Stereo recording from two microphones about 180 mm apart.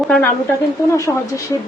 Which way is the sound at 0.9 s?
15° left (ahead or behind).